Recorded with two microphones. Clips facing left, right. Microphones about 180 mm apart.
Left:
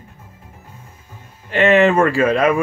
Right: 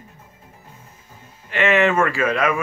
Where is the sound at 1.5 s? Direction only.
35° left (ahead or behind).